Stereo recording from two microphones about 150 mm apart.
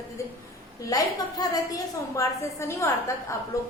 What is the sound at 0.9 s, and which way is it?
A woman's voice, 25° left (ahead or behind).